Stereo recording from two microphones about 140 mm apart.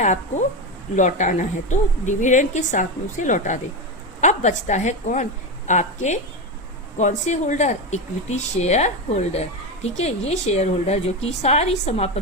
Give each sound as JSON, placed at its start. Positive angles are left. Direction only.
{"t": 0.0, "sound": "a woman's voice", "side_deg": 55}